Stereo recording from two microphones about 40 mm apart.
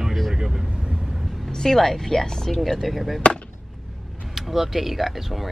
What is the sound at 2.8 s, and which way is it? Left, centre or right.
Speech, centre.